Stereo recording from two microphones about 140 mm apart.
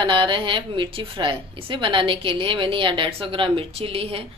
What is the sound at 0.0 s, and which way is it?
A woman's voice, 35° right (ahead or behind).